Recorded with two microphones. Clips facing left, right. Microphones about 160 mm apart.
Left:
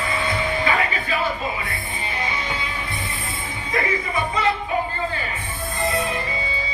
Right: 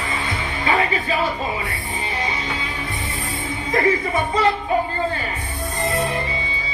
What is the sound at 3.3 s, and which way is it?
Speech, 40° right (ahead or behind).